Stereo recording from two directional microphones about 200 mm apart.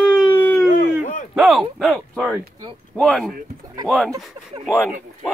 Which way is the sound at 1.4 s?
Centre (ahead or behind).